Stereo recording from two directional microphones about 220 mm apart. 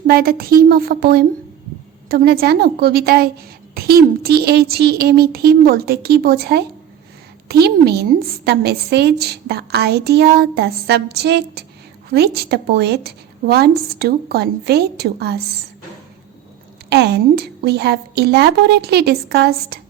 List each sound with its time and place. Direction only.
0.1 s a woman's voice: 45° right (ahead or behind)
16.9 s a woman's voice: 50° right (ahead or behind)